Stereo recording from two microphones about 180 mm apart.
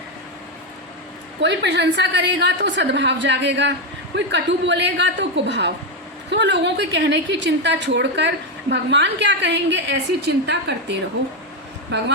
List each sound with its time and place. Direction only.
1.4 s a woman's voice: 75° right (ahead or behind)